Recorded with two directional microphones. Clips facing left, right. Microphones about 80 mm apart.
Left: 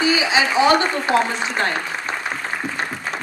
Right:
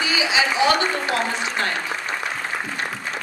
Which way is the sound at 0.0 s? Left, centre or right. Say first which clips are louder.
Left 3 dB; left.